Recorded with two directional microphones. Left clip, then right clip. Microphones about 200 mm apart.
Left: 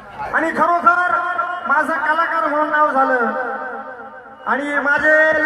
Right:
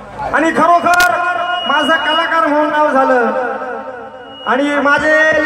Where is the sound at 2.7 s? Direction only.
30° right (ahead or behind).